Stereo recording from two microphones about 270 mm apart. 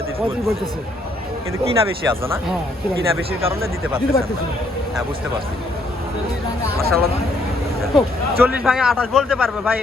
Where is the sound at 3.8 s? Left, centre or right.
Centre.